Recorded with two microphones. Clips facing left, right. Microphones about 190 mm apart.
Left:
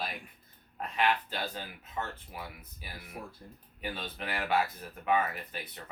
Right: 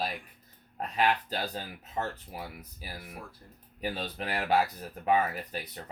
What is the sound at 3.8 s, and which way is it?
Speech, 35° right (ahead or behind).